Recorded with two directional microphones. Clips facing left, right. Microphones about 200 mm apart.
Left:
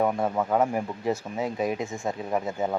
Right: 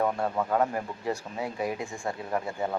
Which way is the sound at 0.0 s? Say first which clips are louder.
Left 3 dB; 15° left (ahead or behind).